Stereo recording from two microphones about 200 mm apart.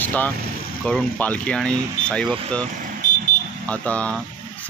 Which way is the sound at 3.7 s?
5° left (ahead or behind).